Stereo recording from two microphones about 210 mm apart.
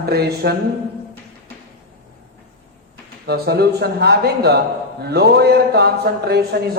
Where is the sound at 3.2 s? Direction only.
50° right (ahead or behind).